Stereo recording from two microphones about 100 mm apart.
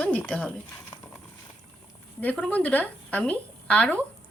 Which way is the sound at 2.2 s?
15° left (ahead or behind).